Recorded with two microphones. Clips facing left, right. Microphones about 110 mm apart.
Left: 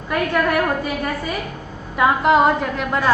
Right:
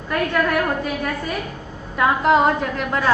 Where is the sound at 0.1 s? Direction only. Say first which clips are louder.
Left 1 dB; 5° left (ahead or behind).